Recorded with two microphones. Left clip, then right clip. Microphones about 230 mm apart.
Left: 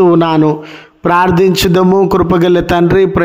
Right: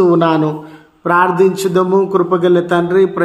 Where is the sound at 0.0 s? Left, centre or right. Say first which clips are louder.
Left 3 dB; left.